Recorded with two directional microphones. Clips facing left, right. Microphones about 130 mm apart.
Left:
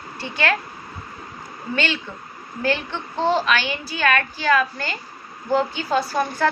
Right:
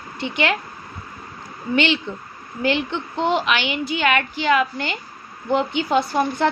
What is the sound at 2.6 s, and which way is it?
A woman's voice, 20° right (ahead or behind).